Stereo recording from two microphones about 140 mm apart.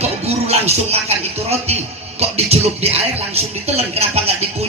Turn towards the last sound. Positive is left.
turn(degrees=-45)  # may be behind; listen again after turning